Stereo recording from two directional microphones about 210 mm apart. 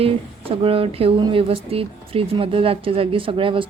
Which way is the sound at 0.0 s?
25° right (ahead or behind).